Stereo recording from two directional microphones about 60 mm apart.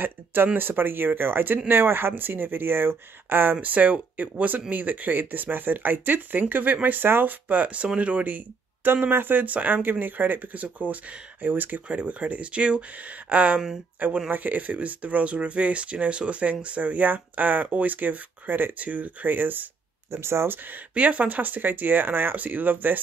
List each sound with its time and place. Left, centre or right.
0.0 s speech: right
7.4 s speech: right
20.1 s speech: right
20.6 s speech: right